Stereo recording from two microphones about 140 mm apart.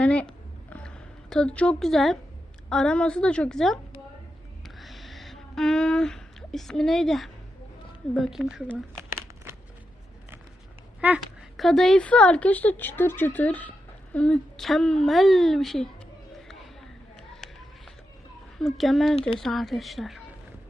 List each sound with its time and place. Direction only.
0.0 s a sound: 10° left (ahead or behind)
2.6 s a woman's voice: 5° left (ahead or behind)
4.8 s a sound: centre (ahead or behind)
8.1 s a woman's voice: centre (ahead or behind)
11.5 s a woman's voice: centre (ahead or behind)
18.6 s a woman's voice: centre (ahead or behind)